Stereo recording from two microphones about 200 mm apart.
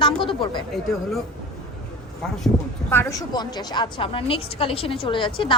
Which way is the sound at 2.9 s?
15° left (ahead or behind).